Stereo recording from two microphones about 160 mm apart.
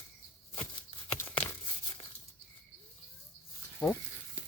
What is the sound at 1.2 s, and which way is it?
Tearing, 15° left (ahead or behind).